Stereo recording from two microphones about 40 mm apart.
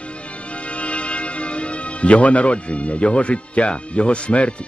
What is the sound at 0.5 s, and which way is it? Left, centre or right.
A man's voice, left.